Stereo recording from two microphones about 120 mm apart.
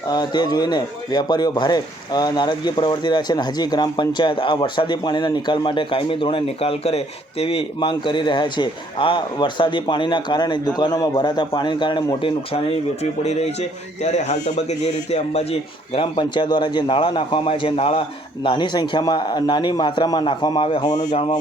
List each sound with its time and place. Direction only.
0.1 s a man's voice: 35° left (ahead or behind)
12.2 s speech: 50° left (ahead or behind)
16.0 s a man's voice: 40° left (ahead or behind)
18.4 s a man's voice: 40° left (ahead or behind)